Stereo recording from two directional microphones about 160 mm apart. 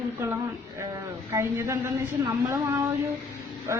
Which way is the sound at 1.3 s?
20° right (ahead or behind).